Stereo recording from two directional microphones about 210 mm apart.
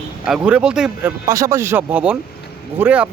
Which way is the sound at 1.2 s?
15° right (ahead or behind).